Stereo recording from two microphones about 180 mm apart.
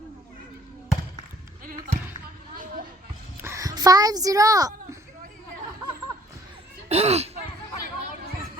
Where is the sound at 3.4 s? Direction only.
15° right (ahead or behind).